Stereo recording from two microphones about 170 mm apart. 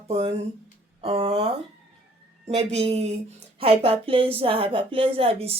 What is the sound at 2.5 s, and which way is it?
Speech, 35° right (ahead or behind).